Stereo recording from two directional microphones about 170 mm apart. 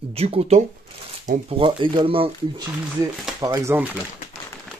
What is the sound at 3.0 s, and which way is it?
Speech, 20° right (ahead or behind).